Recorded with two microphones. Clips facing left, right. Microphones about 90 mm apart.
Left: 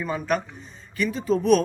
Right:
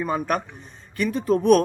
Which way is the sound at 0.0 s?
45° right (ahead or behind).